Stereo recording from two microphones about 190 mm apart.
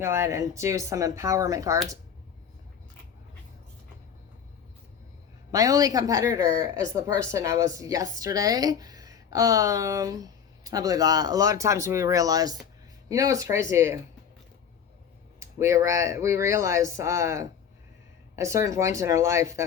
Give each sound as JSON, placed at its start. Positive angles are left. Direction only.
{"t": 0.0, "sound": "a woman's voice", "side_deg": -15}
{"t": 5.5, "sound": "a woman's voice", "side_deg": -15}
{"t": 15.4, "sound": "a woman's voice", "side_deg": -15}